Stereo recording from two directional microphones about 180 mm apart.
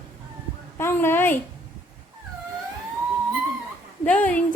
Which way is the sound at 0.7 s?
15° left (ahead or behind).